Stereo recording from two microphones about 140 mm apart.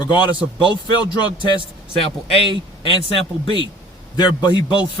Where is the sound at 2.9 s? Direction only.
35° left (ahead or behind).